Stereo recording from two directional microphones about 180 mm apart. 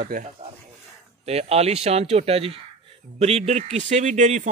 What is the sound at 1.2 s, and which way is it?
Speech, 35° right (ahead or behind).